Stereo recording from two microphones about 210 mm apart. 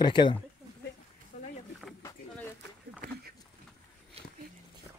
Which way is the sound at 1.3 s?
35° left (ahead or behind).